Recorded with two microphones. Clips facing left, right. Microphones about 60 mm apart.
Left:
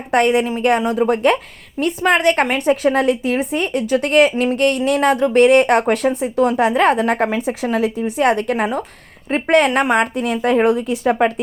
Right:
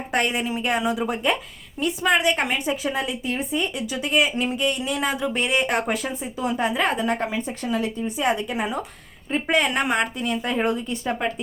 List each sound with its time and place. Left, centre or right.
0.1 s speech: left
2.0 s speech: left
3.7 s speech: left